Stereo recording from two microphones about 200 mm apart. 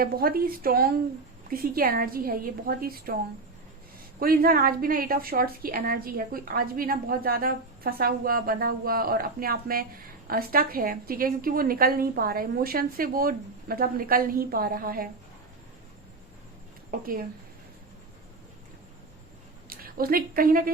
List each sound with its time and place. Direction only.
0.0 s a woman's voice: 45° right (ahead or behind)
4.2 s a woman's voice: 45° right (ahead or behind)
16.9 s a woman's voice: 45° right (ahead or behind)
19.6 s a woman's voice: 45° right (ahead or behind)